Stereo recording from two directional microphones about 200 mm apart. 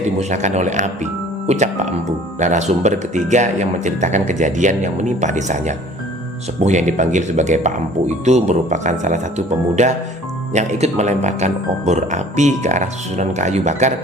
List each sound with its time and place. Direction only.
0.2 s speech: 35° right (ahead or behind)